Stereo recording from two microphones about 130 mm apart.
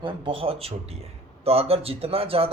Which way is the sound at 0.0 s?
45° right (ahead or behind).